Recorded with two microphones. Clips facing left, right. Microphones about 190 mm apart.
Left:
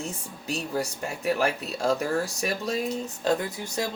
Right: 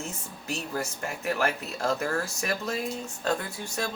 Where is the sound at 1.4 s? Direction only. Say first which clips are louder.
Left 2 dB; 15° left (ahead or behind).